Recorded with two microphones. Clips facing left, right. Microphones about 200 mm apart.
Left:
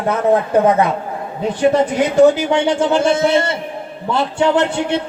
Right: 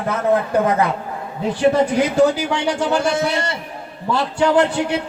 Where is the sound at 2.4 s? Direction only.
25° left (ahead or behind).